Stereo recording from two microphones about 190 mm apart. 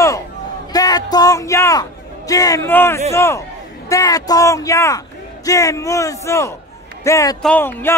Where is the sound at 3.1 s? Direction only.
15° left (ahead or behind).